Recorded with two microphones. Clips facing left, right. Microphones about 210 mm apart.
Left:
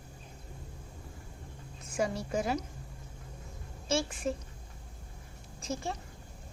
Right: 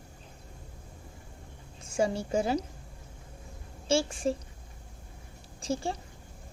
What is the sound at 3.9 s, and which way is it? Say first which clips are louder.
Speech: right 4 dB; 30° right (ahead or behind).